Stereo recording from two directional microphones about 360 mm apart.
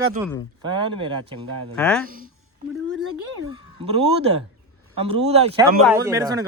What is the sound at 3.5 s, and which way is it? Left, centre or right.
A man's voice, centre.